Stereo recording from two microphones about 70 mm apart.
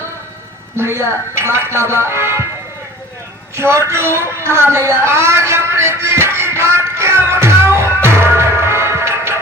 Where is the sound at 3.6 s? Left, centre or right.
Right.